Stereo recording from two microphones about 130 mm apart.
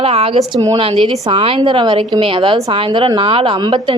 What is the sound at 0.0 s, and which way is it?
Speech, 50° right (ahead or behind).